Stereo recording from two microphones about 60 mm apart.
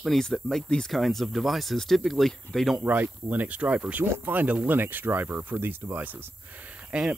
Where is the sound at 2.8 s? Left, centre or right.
Right.